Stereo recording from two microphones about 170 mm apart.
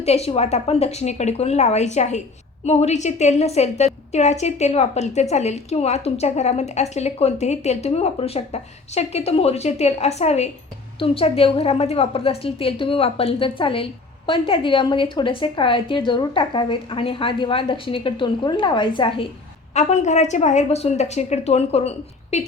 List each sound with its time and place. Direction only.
0.0 s a woman's voice: 40° left (ahead or behind)
19.7 s a woman's voice: 40° left (ahead or behind)